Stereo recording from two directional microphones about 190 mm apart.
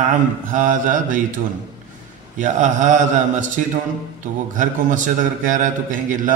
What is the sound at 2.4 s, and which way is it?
A man's voice, 40° right (ahead or behind).